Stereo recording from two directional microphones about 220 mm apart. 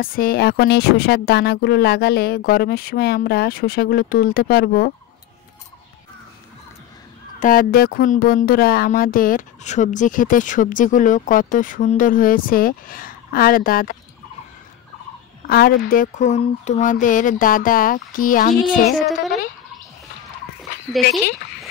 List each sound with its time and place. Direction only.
0.0 s speech: 40° left (ahead or behind)
7.3 s speech: 40° left (ahead or behind)
15.4 s speech: 45° left (ahead or behind)